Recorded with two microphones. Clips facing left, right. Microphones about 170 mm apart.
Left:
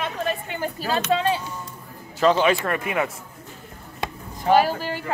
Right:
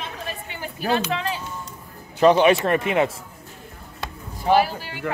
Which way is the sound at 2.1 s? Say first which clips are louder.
Right 3 dB; 20° right (ahead or behind).